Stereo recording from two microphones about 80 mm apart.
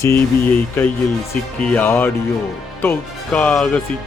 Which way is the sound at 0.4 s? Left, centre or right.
Left.